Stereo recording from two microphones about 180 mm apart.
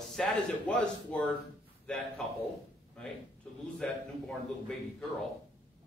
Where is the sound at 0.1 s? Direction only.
5° left (ahead or behind).